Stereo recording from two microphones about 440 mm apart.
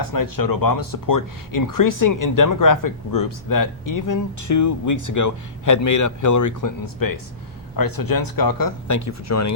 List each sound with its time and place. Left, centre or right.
0.0 s speech: left